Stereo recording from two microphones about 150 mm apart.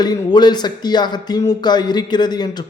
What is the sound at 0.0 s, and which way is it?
A man's voice, 25° left (ahead or behind).